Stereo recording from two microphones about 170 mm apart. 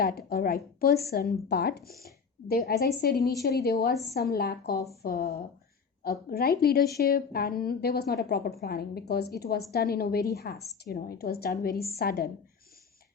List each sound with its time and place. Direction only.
0.0 s a woman's voice: 65° left (ahead or behind)